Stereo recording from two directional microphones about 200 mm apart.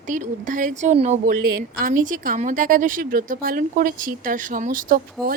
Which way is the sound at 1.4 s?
45° right (ahead or behind).